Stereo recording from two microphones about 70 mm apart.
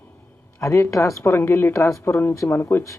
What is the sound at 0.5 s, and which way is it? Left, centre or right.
Speech, left.